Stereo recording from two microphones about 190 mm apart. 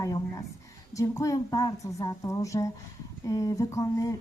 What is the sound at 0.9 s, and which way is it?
A woman's voice, 15° left (ahead or behind).